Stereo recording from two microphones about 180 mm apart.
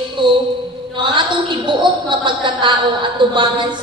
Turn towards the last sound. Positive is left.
turn(degrees=-25)  # may be behind; listen again after turning